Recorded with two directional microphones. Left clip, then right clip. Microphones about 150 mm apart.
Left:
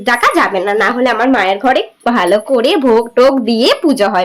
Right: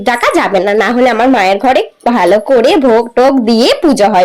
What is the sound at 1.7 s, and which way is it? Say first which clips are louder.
Speech: right 2 dB; 25° right (ahead or behind).